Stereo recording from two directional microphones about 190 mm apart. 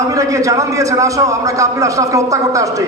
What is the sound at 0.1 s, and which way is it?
A man's voice, 15° right (ahead or behind).